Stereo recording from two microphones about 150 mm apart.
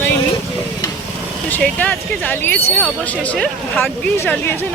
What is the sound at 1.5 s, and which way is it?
Speech, 10° left (ahead or behind).